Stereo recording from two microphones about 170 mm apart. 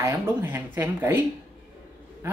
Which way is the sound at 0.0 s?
15° right (ahead or behind).